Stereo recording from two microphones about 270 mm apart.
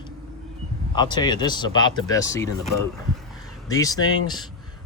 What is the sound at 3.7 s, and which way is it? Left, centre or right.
Speech, centre.